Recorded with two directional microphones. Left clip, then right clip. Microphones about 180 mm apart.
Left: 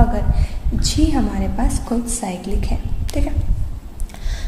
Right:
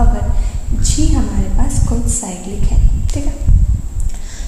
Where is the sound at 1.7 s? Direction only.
45° left (ahead or behind).